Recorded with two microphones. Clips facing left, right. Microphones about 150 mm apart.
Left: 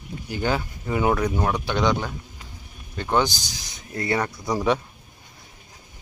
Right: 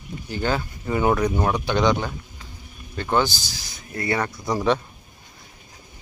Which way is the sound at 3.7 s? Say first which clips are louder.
Even; 20° left (ahead or behind).